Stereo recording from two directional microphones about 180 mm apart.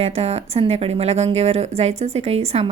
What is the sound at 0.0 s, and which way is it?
A woman's voice, 35° right (ahead or behind).